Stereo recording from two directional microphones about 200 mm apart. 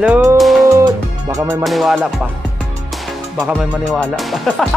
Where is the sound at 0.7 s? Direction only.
15° right (ahead or behind).